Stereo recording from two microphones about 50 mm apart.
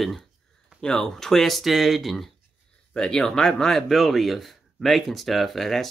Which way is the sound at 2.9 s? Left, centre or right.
Centre.